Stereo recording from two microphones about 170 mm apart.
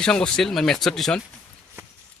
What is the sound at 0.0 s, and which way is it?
Speech, 5° left (ahead or behind).